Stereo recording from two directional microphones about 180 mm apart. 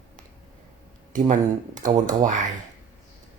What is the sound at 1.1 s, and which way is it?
Speech, 45° right (ahead or behind).